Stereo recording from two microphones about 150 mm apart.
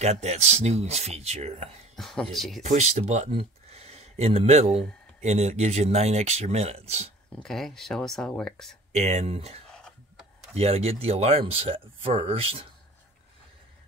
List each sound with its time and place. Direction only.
0.0 s speech: 45° right (ahead or behind)
2.0 s speech: 5° left (ahead or behind)
2.6 s speech: 50° right (ahead or behind)
7.3 s speech: 5° left (ahead or behind)
8.9 s speech: 45° right (ahead or behind)
9.8 s a sound: 5° left (ahead or behind)
10.5 s speech: 40° right (ahead or behind)